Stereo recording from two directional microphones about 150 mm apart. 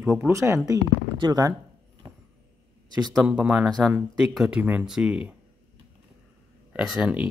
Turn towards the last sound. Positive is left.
turn(degrees=-5)  # may be behind; listen again after turning